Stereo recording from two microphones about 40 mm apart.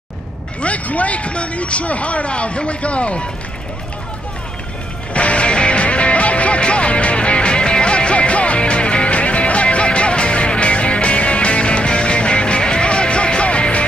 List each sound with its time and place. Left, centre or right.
0.6 s speech: left
5.1 s music: left